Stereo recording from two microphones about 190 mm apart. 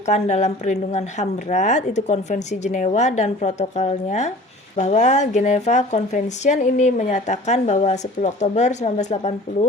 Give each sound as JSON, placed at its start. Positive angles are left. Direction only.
{"t": 0.1, "sound": "speech", "side_deg": 35}